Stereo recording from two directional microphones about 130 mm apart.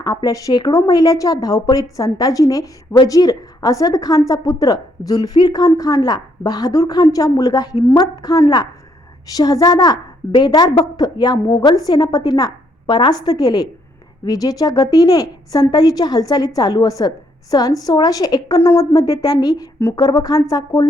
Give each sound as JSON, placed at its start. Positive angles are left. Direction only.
{"t": 0.0, "sound": "a woman's voice", "side_deg": 30}